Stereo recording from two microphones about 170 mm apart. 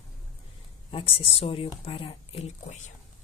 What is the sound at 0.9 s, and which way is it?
Speech, 30° left (ahead or behind).